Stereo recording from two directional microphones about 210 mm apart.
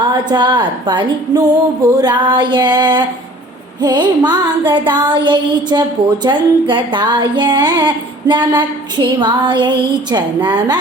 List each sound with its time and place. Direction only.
0.1 s music: 20° right (ahead or behind)